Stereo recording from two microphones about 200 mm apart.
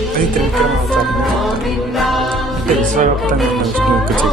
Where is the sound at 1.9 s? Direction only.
Centre (ahead or behind).